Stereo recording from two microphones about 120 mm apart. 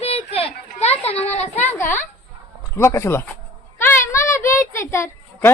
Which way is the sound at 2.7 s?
25° left (ahead or behind).